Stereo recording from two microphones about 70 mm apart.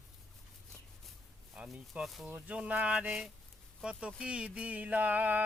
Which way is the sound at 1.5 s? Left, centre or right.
Centre.